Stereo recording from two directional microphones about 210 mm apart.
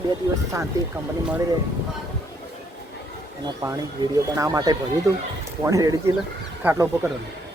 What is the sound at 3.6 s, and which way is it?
Speech, 15° right (ahead or behind).